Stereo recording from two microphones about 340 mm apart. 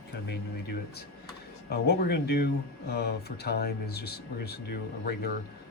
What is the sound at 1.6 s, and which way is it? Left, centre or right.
Speech, left.